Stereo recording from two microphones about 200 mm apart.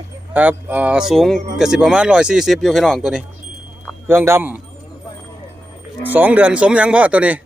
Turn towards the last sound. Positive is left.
turn(degrees=-5)  # may be behind; listen again after turning